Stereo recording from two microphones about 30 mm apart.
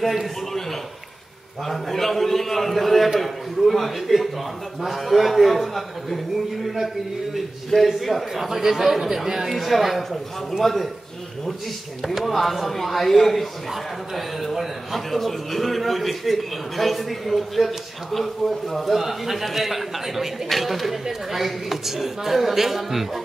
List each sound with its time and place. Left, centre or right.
0.0 s a man's voice: centre
1.7 s a man's voice: centre
8.4 s a man's voice: centre
12.0 s a man's voice: centre
18.9 s a man's voice: centre